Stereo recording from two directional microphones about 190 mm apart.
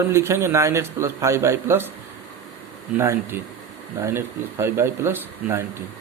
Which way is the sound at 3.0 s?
15° right (ahead or behind).